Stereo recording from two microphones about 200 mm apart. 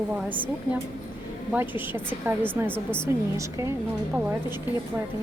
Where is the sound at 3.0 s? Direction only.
15° right (ahead or behind).